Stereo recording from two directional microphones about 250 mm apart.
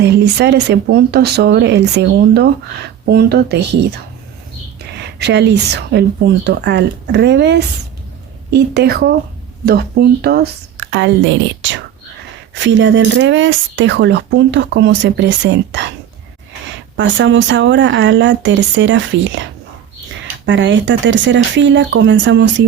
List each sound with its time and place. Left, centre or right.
0.0 s speech: right
5.2 s speech: right
17.0 s speech: right